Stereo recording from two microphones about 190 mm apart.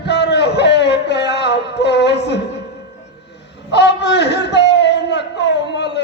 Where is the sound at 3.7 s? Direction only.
65° left (ahead or behind).